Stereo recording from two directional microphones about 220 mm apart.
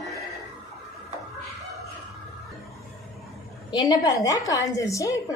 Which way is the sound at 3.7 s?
15° left (ahead or behind).